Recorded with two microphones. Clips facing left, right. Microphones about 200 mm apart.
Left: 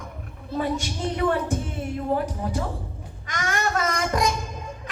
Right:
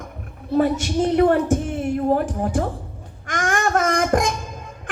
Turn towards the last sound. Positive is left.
turn(degrees=-50)  # may be behind; listen again after turning